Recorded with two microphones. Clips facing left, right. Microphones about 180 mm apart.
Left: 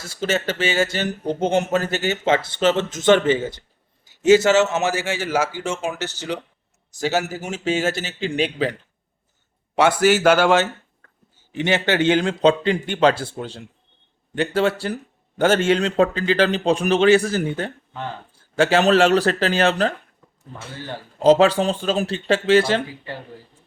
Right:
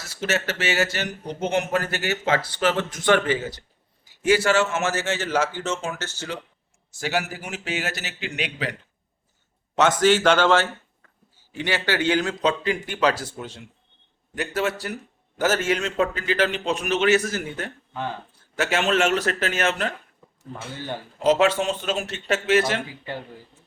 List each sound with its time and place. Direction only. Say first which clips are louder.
0.0 s a man's voice: left 3 dB; 25° left (ahead or behind)
7.4 s speech: left 8 dB; 25° left (ahead or behind)
9.7 s a man's voice: left 2 dB; 10° left (ahead or behind); by 19.9 s 35° left (ahead or behind)
21.2 s a man's voice: left 5 dB; 30° left (ahead or behind)